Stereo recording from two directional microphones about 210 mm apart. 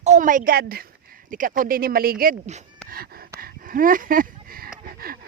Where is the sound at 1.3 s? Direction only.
40° right (ahead or behind).